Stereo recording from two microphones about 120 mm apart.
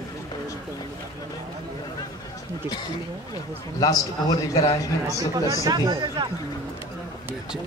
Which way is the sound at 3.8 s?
30° left (ahead or behind).